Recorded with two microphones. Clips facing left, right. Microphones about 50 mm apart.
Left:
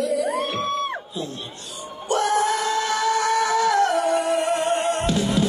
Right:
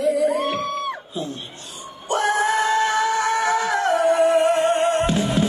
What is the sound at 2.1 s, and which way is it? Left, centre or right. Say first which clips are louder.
Music: right 1 dB; right.